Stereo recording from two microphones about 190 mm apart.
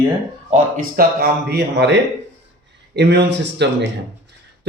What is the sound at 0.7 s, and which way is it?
Speech, 50° right (ahead or behind).